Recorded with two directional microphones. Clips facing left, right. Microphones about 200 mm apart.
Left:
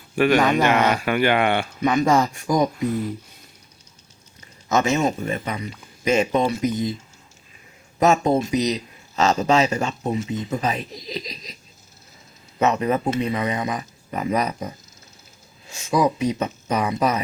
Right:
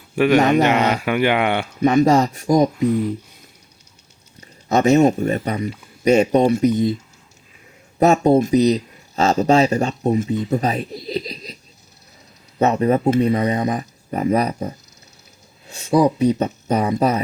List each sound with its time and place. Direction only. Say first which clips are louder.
0.2 s speech: right 3 dB; 20° right (ahead or behind)
0.7 s speech: right 1 dB; 10° right (ahead or behind)
1.8 s speech: right 5 dB; 40° right (ahead or behind)
2.8 s speech: right 5 dB; 5° left (ahead or behind)
4.4 s a sound: right 3 dB; 35° right (ahead or behind)
5.0 s speech: right 6 dB; 45° right (ahead or behind)
7.9 s speech: right 4 dB; 35° right (ahead or behind)
12.5 s speech: right 4 dB; 35° right (ahead or behind)
15.9 s speech: right 5 dB; 35° right (ahead or behind)